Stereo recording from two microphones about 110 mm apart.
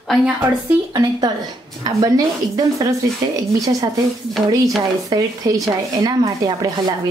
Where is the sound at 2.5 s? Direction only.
35° right (ahead or behind).